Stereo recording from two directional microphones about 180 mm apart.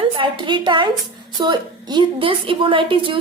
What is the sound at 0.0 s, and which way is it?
A woman's voice, 25° right (ahead or behind).